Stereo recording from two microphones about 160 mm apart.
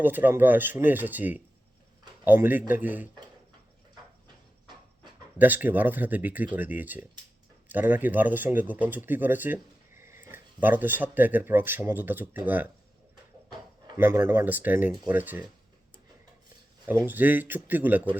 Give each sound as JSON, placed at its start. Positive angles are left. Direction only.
{"t": 0.0, "sound": "speech", "side_deg": -10}
{"t": 5.4, "sound": "speech", "side_deg": -10}
{"t": 13.5, "sound": "a sound", "side_deg": -25}
{"t": 14.0, "sound": "speech", "side_deg": -15}
{"t": 16.8, "sound": "speech", "side_deg": -15}